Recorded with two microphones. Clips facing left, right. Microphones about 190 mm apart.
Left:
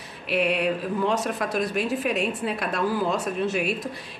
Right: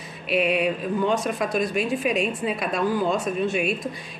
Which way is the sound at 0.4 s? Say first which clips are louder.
Right 2 dB; 70° left (ahead or behind).